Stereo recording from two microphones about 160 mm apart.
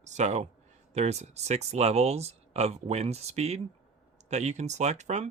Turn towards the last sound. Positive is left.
turn(degrees=-45)  # may be behind; listen again after turning